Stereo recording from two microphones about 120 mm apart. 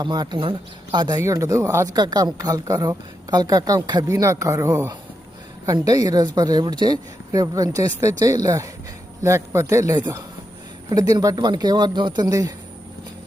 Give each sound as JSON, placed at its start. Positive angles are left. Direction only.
{"t": 0.0, "sound": "speech", "side_deg": -35}